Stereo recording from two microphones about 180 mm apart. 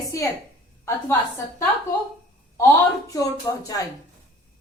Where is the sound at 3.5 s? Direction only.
20° left (ahead or behind).